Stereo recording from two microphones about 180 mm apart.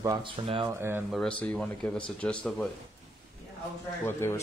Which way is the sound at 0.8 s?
10° right (ahead or behind).